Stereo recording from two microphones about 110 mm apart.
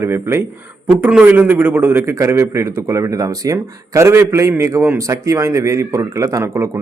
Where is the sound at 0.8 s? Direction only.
15° right (ahead or behind).